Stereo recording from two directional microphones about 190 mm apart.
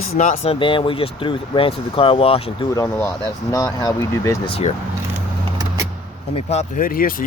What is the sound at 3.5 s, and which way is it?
Speech, 20° left (ahead or behind).